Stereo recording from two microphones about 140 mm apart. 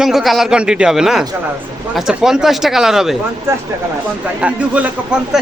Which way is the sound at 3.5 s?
20° right (ahead or behind).